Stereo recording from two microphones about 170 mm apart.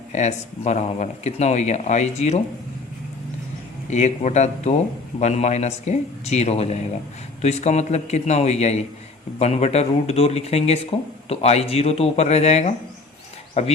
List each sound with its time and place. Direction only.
0.1 s speech: 40° left (ahead or behind)
3.8 s speech: 40° left (ahead or behind)